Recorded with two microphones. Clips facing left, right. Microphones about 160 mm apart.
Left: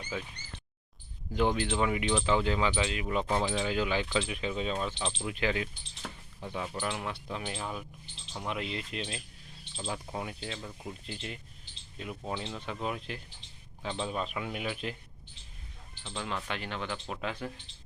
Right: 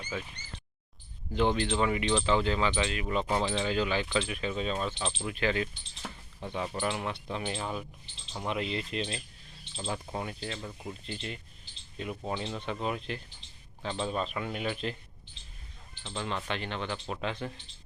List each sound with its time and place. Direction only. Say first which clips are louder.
1.3 s speech: right 1 dB; 5° left (ahead or behind)
3.2 s speech: right 1 dB; centre (ahead or behind)
4.9 s speech: right 1 dB; centre (ahead or behind)
5.2 s speech: right 2 dB; 10° left (ahead or behind)
6.0 s speech: right 1 dB; centre (ahead or behind)
16.2 s speech: right 2 dB; 5° left (ahead or behind)